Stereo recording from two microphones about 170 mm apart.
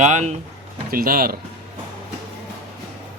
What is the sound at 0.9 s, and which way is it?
Speech, 60° right (ahead or behind).